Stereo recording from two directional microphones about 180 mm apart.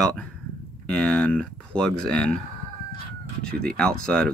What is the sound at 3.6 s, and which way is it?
Speech, 5° left (ahead or behind).